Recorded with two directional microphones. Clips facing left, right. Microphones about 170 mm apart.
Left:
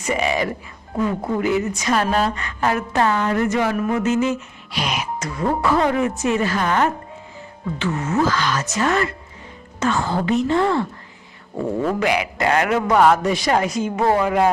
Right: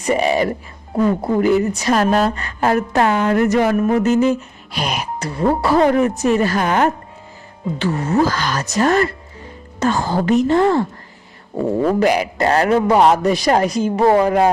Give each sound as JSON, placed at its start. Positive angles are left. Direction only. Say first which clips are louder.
{"t": 0.0, "sound": "a man's voice", "louder": "right 5 dB", "side_deg": -35}
{"t": 3.0, "sound": "speech", "louder": "right 1 dB", "side_deg": -20}
{"t": 3.2, "sound": "a man's voice", "louder": "right 5 dB", "side_deg": -40}